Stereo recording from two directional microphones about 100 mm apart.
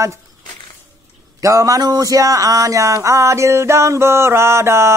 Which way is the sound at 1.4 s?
35° right (ahead or behind).